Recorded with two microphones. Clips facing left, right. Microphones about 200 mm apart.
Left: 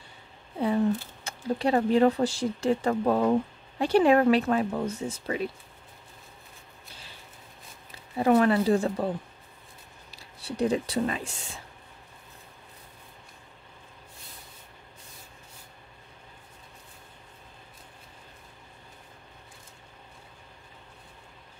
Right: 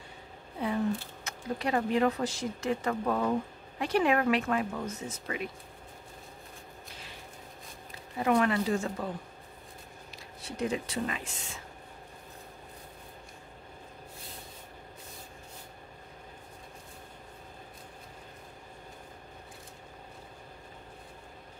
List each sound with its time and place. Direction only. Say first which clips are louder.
1.2 s speech: left 8 dB; 30° left (ahead or behind)
8.2 s speech: left 5 dB; 35° left (ahead or behind)
10.1 s speech: left 6 dB; 35° left (ahead or behind)